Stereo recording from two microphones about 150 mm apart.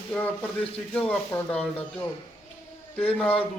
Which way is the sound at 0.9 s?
10° left (ahead or behind).